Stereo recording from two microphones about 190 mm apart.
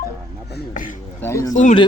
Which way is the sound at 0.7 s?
45° left (ahead or behind).